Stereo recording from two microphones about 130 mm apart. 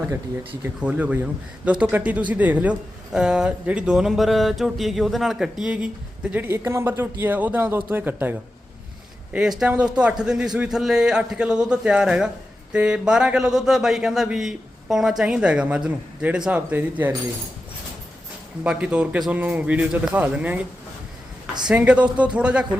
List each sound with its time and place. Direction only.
0.8 s speech: 10° right (ahead or behind)
9.3 s a man's voice: 5° right (ahead or behind)
18.6 s speech: 10° right (ahead or behind)
21.7 s speech: 10° right (ahead or behind)